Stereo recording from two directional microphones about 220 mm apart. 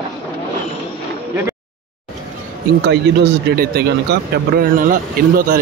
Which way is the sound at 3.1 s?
50° right (ahead or behind).